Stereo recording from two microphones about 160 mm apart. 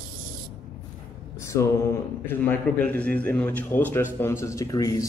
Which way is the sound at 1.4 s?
20° left (ahead or behind).